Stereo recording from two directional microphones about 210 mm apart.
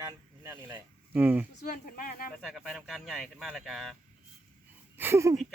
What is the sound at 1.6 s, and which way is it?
Speech, 40° left (ahead or behind).